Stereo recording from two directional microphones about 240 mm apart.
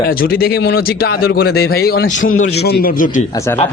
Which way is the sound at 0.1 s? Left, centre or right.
Left.